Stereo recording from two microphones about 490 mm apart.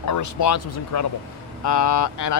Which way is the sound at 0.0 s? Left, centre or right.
Left.